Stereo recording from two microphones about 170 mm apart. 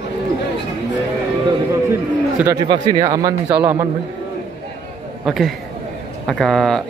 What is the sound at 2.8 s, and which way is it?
Speech, 20° right (ahead or behind).